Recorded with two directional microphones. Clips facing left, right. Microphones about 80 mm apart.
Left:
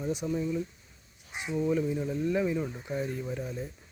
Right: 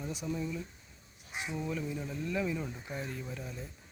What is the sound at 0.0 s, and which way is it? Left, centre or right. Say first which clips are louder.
Speech: left 8 dB; left.